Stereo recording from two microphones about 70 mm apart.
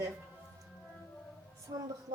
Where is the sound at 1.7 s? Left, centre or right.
Right.